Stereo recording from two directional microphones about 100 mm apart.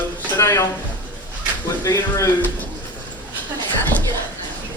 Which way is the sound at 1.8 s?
35° left (ahead or behind).